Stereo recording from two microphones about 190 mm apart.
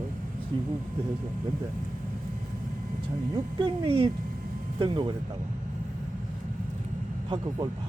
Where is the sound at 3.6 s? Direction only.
30° right (ahead or behind).